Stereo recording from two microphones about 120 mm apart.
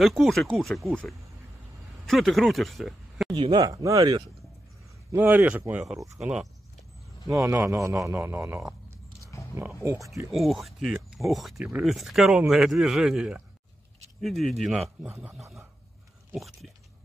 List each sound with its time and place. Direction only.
0.0 s speech: centre (ahead or behind)
3.3 s speech: 45° right (ahead or behind)
3.6 s a man's voice: 30° right (ahead or behind)
5.1 s speech: 15° right (ahead or behind)
7.2 s a man's voice: 20° right (ahead or behind)
9.3 s a sound: 25° left (ahead or behind)
10.3 s speech: centre (ahead or behind)
15.0 s a man's voice: 20° right (ahead or behind)
16.3 s speech: centre (ahead or behind)